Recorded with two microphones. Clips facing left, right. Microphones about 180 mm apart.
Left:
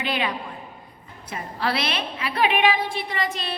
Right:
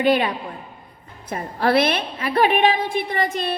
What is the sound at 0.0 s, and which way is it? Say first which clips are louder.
A woman's voice: right 8 dB; 45° right (ahead or behind).